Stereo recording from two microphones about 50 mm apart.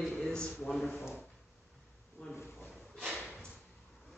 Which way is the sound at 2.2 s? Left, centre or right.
Left.